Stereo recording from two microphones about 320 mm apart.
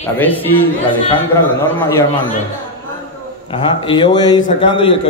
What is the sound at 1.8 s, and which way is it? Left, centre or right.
Speech, centre.